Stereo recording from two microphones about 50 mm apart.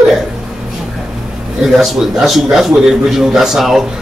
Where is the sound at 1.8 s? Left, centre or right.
Centre.